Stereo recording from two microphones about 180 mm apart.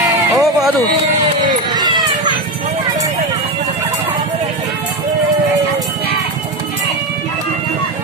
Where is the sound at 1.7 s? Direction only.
25° right (ahead or behind).